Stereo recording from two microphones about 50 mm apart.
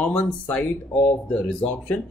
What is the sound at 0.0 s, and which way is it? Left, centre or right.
Speech, left.